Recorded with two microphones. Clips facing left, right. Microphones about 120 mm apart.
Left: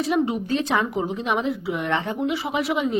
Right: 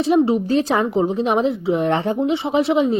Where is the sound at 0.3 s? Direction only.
35° right (ahead or behind).